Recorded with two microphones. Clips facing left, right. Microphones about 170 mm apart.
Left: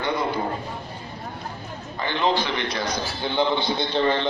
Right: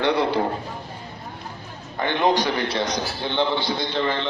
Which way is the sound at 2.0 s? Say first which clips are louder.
Right 3 dB; 55° right (ahead or behind).